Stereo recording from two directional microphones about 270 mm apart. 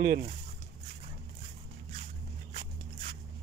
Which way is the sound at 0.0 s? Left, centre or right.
Right.